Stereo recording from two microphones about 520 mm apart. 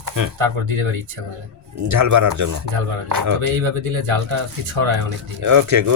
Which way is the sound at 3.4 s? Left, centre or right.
Right.